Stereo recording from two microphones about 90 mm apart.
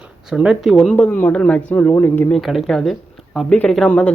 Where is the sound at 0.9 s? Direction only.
20° left (ahead or behind).